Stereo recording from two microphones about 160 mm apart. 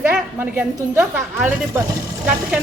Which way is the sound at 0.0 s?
10° right (ahead or behind).